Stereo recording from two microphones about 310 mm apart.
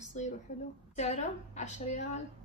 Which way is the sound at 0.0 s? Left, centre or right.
Left.